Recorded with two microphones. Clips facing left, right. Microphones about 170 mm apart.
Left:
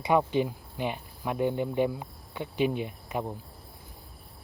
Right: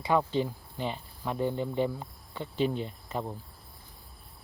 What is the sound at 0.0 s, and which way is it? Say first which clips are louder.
Speech: left 2 dB; 15° left (ahead or behind).